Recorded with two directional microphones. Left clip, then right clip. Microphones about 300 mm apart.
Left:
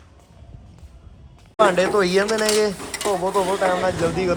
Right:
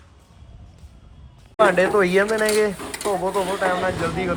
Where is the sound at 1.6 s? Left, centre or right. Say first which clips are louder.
Even; centre.